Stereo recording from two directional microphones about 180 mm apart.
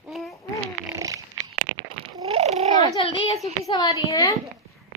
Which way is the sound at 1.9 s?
30° right (ahead or behind).